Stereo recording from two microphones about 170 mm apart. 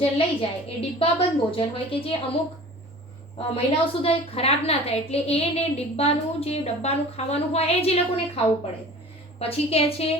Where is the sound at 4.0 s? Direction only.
35° left (ahead or behind).